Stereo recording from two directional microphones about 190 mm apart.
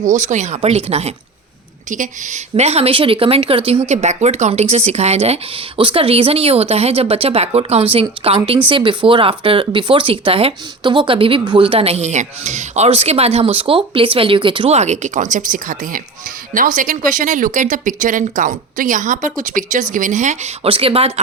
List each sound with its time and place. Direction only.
0.0 s speech: 40° right (ahead or behind)